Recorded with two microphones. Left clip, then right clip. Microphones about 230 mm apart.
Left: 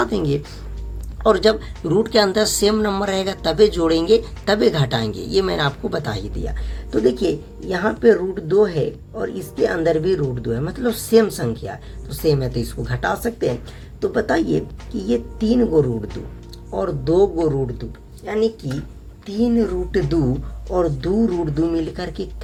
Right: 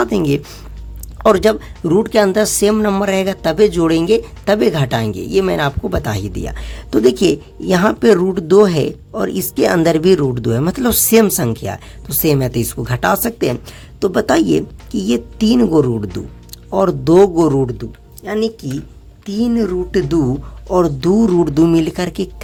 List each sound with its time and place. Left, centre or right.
0.0 s speech: right
15.5 s speech: right